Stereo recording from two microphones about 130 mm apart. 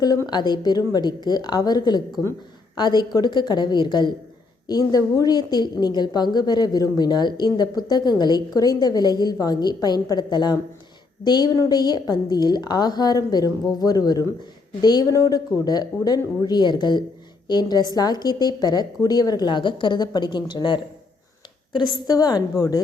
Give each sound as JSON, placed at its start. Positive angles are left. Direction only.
{"t": 0.0, "sound": "a woman's voice", "side_deg": 30}